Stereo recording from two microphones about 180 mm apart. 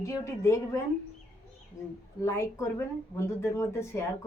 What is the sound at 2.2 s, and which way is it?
Speech, 15° left (ahead or behind).